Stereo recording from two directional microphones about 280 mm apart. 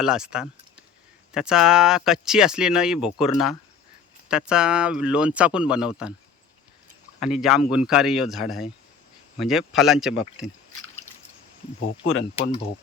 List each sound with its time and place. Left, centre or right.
0.0 s speech: centre
7.2 s speech: centre
11.8 s speech: left
12.4 s speech: left